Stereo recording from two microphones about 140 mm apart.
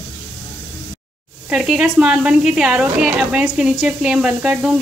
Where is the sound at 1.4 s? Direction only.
5° right (ahead or behind).